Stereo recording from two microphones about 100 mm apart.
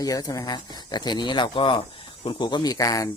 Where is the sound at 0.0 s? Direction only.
40° left (ahead or behind).